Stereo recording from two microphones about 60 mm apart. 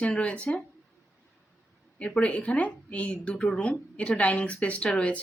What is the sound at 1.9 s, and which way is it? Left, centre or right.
Speech, centre.